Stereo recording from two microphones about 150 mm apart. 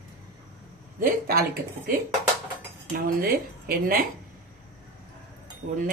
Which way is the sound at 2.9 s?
80° right.